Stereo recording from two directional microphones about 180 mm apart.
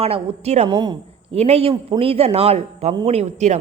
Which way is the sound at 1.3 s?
35° right (ahead or behind).